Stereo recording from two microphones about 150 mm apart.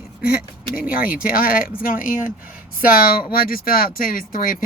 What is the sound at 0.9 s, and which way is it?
Speech, 70° left (ahead or behind).